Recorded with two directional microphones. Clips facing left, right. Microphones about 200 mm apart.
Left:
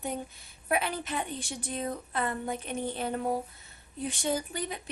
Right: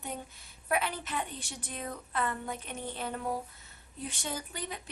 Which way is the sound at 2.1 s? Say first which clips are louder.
Left 1 dB; 15° left (ahead or behind).